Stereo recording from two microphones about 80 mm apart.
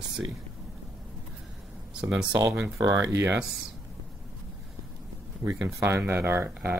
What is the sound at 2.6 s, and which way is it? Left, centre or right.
Speech, right.